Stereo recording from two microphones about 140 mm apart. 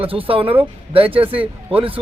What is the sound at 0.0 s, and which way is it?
Speech, 40° right (ahead or behind).